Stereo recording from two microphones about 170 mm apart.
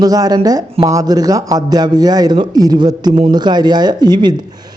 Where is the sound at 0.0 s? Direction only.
20° right (ahead or behind).